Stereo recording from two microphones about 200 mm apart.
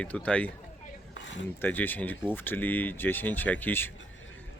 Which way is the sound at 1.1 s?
65° left (ahead or behind).